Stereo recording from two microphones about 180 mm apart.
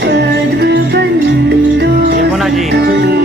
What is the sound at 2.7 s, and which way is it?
Music, 65° right (ahead or behind).